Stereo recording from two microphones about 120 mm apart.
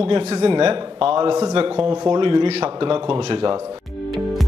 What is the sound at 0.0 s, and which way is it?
A man's voice, 55° right (ahead or behind).